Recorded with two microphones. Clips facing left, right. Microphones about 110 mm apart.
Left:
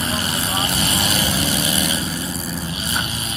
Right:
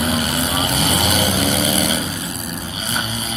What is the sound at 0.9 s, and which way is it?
Vehicle, 55° right (ahead or behind).